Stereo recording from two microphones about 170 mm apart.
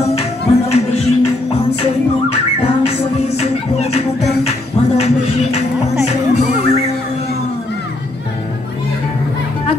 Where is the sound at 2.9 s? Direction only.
35° left (ahead or behind).